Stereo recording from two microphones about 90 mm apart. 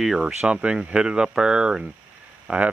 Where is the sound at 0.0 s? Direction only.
5° right (ahead or behind).